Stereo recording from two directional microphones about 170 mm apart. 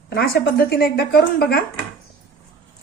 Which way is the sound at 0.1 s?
70° left (ahead or behind).